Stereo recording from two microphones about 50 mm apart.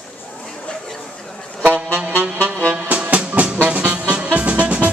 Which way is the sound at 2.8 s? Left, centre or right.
Right.